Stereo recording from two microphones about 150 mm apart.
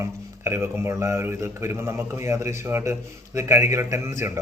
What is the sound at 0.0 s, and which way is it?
A man's voice, 15° right (ahead or behind).